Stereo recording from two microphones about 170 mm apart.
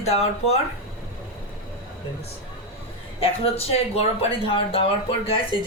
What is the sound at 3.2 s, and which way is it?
Speech, 35° left (ahead or behind).